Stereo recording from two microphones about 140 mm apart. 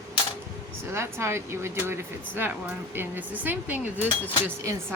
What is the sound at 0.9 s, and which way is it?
Speech, 20° right (ahead or behind).